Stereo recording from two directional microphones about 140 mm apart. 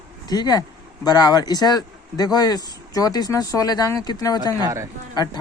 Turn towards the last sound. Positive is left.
turn(degrees=30)  # may be behind; listen again after turning